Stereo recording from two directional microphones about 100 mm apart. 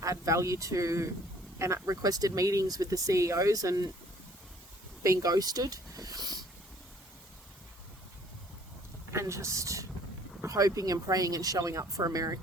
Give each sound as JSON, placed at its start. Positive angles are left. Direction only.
{"t": 0.0, "sound": "speech", "side_deg": -35}
{"t": 5.0, "sound": "speech", "side_deg": -35}
{"t": 9.1, "sound": "speech", "side_deg": -30}